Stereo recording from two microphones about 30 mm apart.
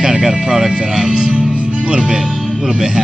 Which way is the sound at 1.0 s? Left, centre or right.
Right.